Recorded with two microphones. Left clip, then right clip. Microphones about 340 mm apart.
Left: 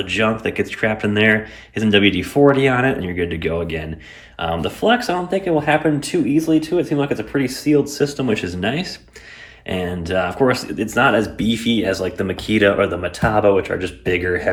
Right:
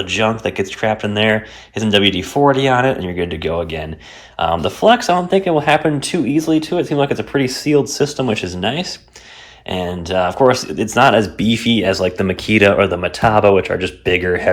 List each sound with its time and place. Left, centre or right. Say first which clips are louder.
0.0 s speech: right 2 dB; centre